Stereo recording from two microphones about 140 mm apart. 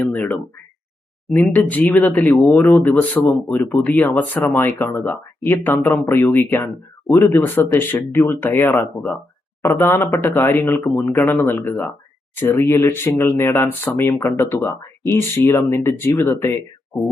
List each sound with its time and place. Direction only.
0.0 s speech: 10° left (ahead or behind)